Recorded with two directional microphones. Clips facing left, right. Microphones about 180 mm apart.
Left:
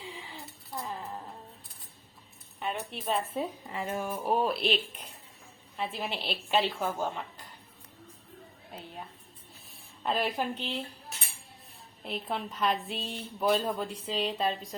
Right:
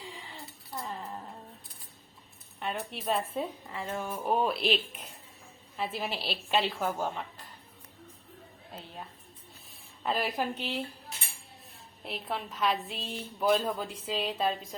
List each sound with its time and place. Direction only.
0.1 s a sound: centre (ahead or behind)
2.6 s a woman's voice: centre (ahead or behind)
3.7 s a woman's voice: 15° left (ahead or behind); by 7.1 s 5° right (ahead or behind)
10.0 s a woman's voice: centre (ahead or behind)
12.0 s a woman's voice: centre (ahead or behind)